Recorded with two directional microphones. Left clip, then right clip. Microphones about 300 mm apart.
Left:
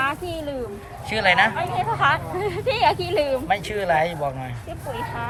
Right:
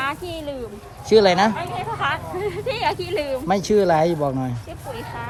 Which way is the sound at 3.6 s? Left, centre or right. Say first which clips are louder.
Right 4 dB; centre.